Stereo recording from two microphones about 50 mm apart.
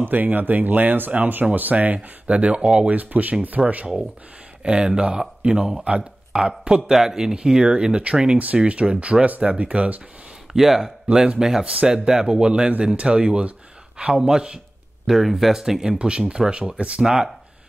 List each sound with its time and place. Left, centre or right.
0.0 s speech: right
2.2 s speech: right
2.9 s speech: right
4.6 s speech: centre
10.5 s speech: centre
15.0 s speech: centre
16.0 s speech: centre
17.0 s speech: centre